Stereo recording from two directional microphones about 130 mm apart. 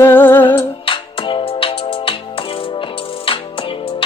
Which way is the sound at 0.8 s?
40° left (ahead or behind).